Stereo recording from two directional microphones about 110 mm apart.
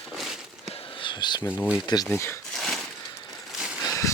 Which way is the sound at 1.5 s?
20° left (ahead or behind).